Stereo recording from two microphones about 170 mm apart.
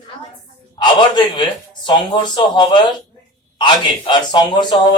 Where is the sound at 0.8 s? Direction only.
25° left (ahead or behind).